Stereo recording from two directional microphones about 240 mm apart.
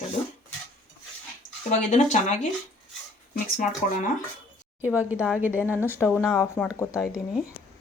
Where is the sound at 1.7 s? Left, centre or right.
Left.